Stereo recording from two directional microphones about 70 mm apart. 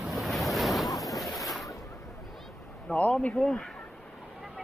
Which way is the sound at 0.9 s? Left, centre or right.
Centre.